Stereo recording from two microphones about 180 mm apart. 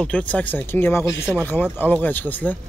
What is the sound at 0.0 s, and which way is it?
Speech, 5° left (ahead or behind).